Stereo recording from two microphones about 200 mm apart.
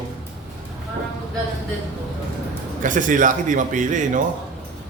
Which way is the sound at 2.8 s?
40° right (ahead or behind).